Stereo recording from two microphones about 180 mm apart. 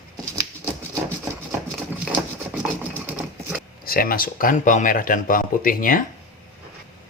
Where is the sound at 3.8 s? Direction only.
55° left (ahead or behind).